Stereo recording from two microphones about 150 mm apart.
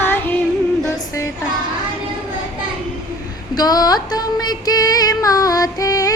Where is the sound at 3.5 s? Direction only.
25° left (ahead or behind).